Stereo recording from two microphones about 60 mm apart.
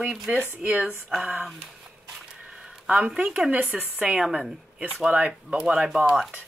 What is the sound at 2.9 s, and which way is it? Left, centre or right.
Speech, centre.